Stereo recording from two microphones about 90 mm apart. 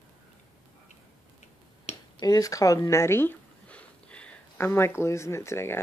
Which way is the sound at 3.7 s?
15° left (ahead or behind).